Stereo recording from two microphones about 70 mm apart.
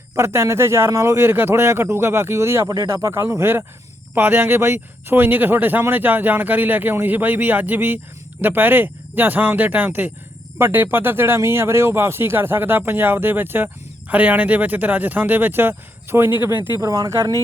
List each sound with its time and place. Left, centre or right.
0.2 s speech: right
16.6 s speech: right